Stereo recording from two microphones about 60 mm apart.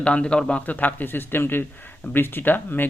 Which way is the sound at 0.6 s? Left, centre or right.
Left.